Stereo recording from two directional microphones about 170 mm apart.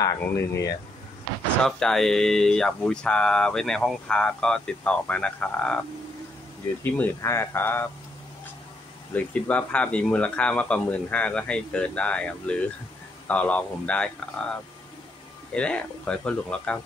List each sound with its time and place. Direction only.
0.0 s speech: 15° left (ahead or behind)
1.6 s speech: 5° left (ahead or behind)
9.1 s speech: 10° left (ahead or behind)
15.5 s speech: 5° left (ahead or behind)